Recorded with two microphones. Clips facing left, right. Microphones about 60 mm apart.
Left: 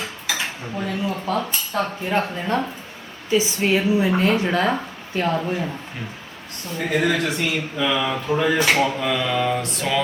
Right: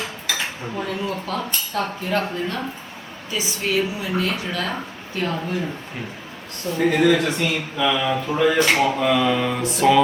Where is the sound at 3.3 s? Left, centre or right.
Left.